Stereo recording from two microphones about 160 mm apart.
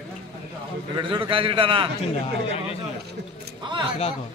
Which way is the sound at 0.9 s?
30° right (ahead or behind).